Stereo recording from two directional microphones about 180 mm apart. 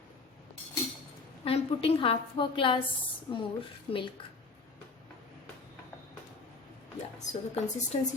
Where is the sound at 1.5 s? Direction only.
30° left (ahead or behind).